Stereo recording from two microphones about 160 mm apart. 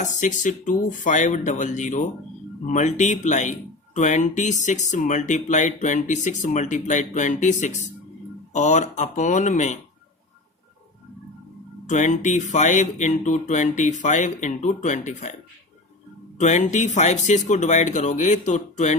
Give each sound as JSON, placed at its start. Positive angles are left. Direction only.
{"t": 0.0, "sound": "speech", "side_deg": 50}
{"t": 11.9, "sound": "speech", "side_deg": 50}
{"t": 16.4, "sound": "speech", "side_deg": 50}